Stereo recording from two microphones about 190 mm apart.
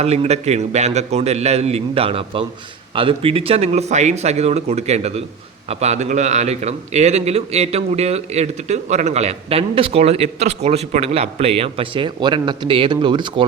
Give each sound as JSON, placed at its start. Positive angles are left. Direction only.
{"t": 0.0, "sound": "a man's voice", "side_deg": -35}